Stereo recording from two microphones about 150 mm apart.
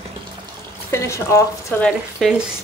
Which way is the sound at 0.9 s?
20° left (ahead or behind).